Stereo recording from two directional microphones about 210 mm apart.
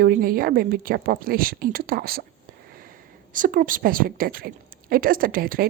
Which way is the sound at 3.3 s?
40° right (ahead or behind).